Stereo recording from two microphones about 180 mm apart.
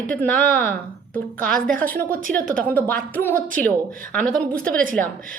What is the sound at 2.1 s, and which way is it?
Speech, 50° right (ahead or behind).